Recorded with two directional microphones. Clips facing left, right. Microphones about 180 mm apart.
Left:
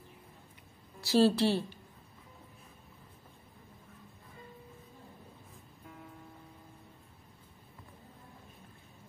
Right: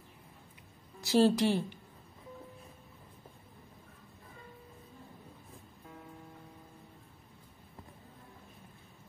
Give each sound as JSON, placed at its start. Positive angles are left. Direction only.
{"t": 1.0, "sound": "a woman's voice", "side_deg": -15}